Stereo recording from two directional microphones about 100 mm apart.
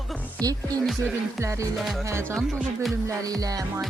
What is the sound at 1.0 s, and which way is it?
Music, 30° right (ahead or behind).